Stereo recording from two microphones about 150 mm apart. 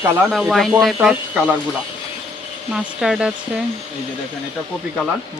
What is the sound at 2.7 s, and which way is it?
Speech, 5° right (ahead or behind).